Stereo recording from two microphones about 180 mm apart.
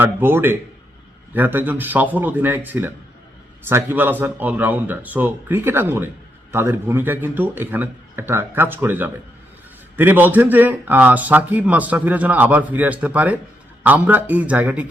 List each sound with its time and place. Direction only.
0.0 s a man's voice: 10° right (ahead or behind)
3.7 s a man's voice: 15° right (ahead or behind)